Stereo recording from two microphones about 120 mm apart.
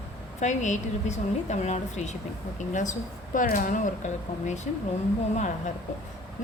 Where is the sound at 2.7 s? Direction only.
90° left.